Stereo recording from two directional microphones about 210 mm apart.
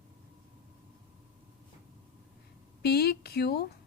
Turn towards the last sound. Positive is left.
turn(degrees=50)  # may be behind; listen again after turning